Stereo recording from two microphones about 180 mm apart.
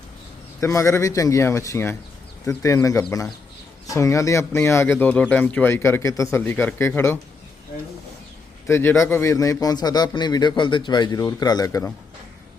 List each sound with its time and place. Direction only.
0.6 s speech: 15° left (ahead or behind)
8.6 s a man's voice: 15° left (ahead or behind)